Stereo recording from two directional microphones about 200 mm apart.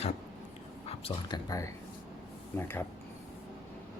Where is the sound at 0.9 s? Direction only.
30° left (ahead or behind).